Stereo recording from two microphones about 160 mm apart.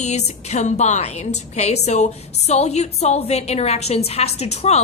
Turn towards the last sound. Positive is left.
turn(degrees=40)  # may be behind; listen again after turning